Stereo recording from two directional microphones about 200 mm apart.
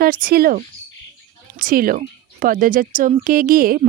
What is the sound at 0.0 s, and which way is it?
A woman's voice, 45° right (ahead or behind).